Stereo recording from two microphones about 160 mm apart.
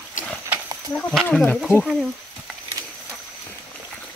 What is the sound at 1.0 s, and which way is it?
Speech, 5° left (ahead or behind).